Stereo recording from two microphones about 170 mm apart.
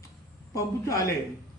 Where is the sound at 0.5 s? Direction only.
20° left (ahead or behind).